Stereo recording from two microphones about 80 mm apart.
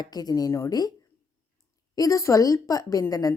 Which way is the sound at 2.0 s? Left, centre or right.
Left.